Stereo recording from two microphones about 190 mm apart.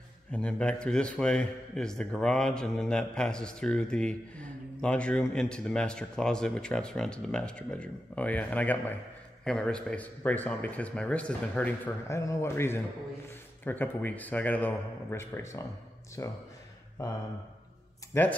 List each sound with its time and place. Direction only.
0.3 s a man's voice: 5° left (ahead or behind)
18.1 s speech: 15° left (ahead or behind)